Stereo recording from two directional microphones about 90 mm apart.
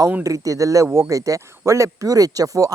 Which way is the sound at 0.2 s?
35° right (ahead or behind).